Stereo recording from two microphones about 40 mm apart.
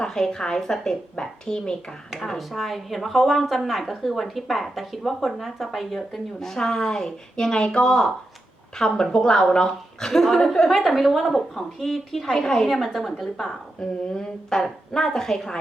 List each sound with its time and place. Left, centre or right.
0.0 s a woman's voice: centre
2.4 s a woman's voice: centre
10.7 s a woman's voice: centre